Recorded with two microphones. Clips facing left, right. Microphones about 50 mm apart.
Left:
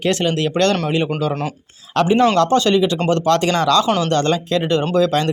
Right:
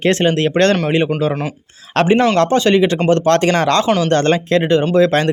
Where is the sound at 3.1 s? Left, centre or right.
Right.